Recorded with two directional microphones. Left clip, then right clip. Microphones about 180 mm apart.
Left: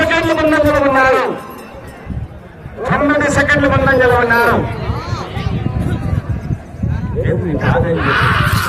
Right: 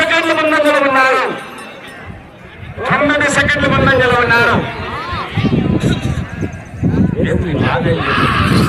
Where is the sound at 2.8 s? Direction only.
30° left (ahead or behind).